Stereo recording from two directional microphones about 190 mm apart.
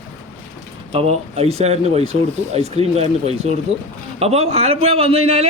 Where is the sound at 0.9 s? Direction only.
30° right (ahead or behind).